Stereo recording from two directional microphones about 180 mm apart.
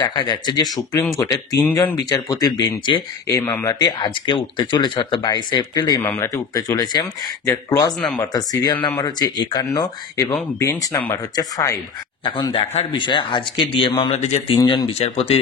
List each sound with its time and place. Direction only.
0.0 s speech: 25° left (ahead or behind)
14.1 s a man's voice: 40° left (ahead or behind)
14.6 s speech: 25° left (ahead or behind)
15.0 s a man's voice: 35° left (ahead or behind)